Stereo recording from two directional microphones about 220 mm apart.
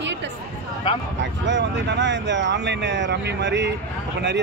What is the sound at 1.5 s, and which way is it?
Speech, 55° right (ahead or behind).